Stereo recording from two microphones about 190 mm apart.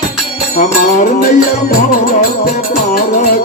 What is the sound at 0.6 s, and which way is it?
Music, 40° left (ahead or behind).